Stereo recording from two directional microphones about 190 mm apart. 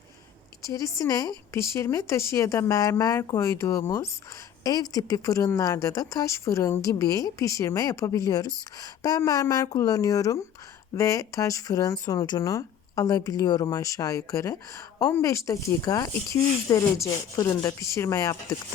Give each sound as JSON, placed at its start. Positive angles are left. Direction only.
{"t": 0.6, "sound": "a woman's voice", "side_deg": 20}